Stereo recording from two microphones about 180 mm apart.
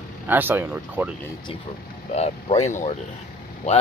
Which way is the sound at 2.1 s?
35° left (ahead or behind).